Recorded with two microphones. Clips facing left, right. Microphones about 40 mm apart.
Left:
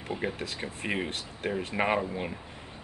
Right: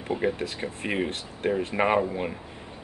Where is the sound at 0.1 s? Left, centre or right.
Centre.